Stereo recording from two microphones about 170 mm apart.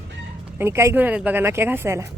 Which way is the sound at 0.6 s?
15° right (ahead or behind).